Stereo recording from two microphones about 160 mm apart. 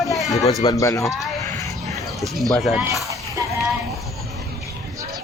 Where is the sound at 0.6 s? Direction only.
20° left (ahead or behind).